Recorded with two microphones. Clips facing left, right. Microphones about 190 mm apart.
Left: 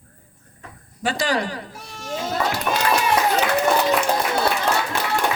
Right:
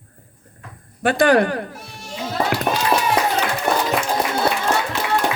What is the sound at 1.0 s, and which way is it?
Speech, 55° right (ahead or behind).